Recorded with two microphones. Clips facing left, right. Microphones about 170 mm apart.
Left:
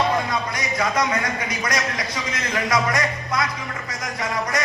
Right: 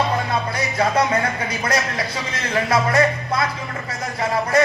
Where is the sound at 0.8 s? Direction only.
30° right (ahead or behind).